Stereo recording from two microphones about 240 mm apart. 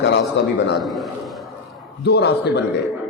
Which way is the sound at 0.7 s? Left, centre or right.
Centre.